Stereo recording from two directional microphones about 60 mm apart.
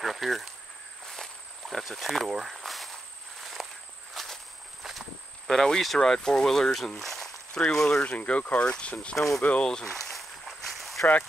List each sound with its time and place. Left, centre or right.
0.0 s a sound: centre
1.0 s insect: centre
3.6 s walk: centre
5.5 s speech: centre
8.0 s speech: left
9.2 s speech: centre
9.6 s a sound: centre